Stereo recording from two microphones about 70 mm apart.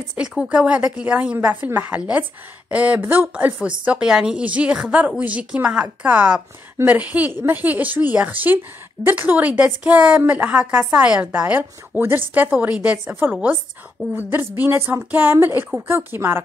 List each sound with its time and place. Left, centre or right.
0.2 s a woman's voice: centre; by 12.4 s right
12.4 s a woman's voice: centre
14.0 s a woman's voice: right